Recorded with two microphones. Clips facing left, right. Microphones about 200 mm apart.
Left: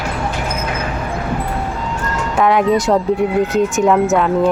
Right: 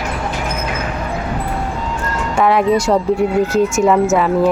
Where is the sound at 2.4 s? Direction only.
Centre (ahead or behind).